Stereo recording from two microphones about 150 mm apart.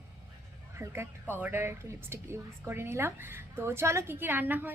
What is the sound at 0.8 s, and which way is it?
A woman's voice, 20° right (ahead or behind).